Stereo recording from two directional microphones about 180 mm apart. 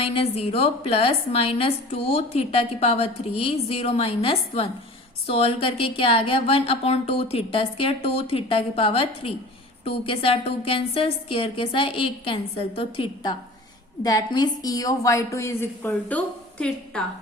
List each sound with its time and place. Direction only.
0.0 s a woman's voice: 30° left (ahead or behind); by 17.0 s 5° left (ahead or behind)